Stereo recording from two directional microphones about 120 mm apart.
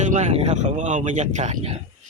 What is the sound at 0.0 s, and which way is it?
Speech, 80° right.